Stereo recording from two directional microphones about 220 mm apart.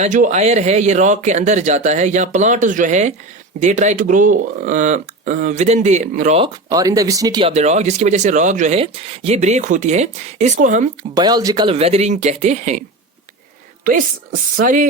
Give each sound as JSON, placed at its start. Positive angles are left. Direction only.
{"t": 0.0, "sound": "speech", "side_deg": -35}
{"t": 11.1, "sound": "speech", "side_deg": -20}
{"t": 14.5, "sound": "speech", "side_deg": -35}